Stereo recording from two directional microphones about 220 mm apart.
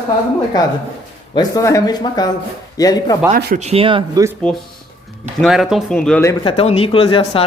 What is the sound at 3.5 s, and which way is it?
Speech, 30° right (ahead or behind).